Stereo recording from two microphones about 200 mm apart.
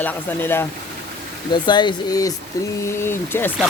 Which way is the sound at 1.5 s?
20° left (ahead or behind).